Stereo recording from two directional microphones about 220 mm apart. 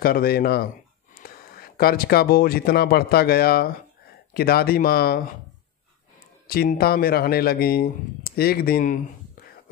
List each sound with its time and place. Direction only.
0.0 s speech: 45° left (ahead or behind)
6.4 s speech: 45° left (ahead or behind)